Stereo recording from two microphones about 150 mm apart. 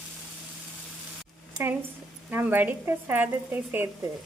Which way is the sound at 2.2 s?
10° right (ahead or behind).